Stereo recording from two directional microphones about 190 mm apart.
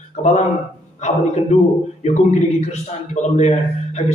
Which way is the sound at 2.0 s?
35° left (ahead or behind).